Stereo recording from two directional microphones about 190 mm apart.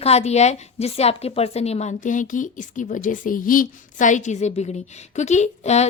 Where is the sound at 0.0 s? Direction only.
35° left (ahead or behind).